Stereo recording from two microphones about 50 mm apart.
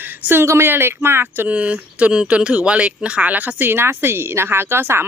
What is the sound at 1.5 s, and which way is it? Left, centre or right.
Speech, right.